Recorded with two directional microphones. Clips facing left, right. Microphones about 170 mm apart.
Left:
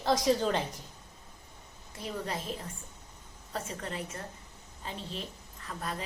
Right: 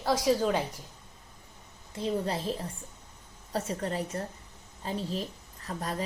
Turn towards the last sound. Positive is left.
turn(degrees=-35)  # may be behind; listen again after turning